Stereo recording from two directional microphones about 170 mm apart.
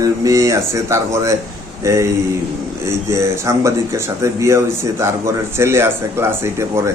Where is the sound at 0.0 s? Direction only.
20° right (ahead or behind).